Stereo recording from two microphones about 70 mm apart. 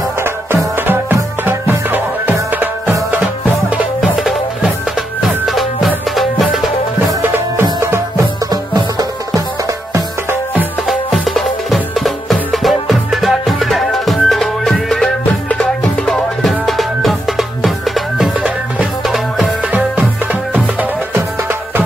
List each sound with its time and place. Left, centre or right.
1.4 s music: right
5.5 s music: centre
10.9 s music: centre
16.1 s music: centre
18.4 s music: centre
19.1 s music: centre